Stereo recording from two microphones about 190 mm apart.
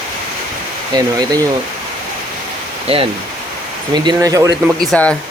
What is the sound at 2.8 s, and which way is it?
Speech, 30° right (ahead or behind).